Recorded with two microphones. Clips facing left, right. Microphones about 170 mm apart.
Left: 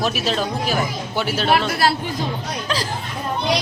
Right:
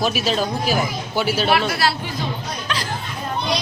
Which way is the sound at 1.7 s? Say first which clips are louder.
Left 2 dB; 45° left (ahead or behind).